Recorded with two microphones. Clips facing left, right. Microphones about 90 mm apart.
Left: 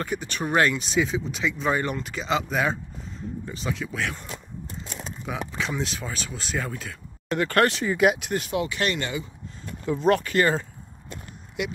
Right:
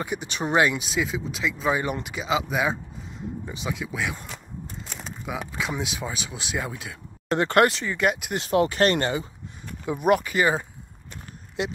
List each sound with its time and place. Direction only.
0.0 s speech: 15° right (ahead or behind)
5.2 s speech: 10° right (ahead or behind)
7.3 s speech: 25° right (ahead or behind)
7.8 s speech: 10° left (ahead or behind)
8.4 s speech: 40° right (ahead or behind)
9.8 s speech: 15° right (ahead or behind)
11.6 s speech: 30° right (ahead or behind)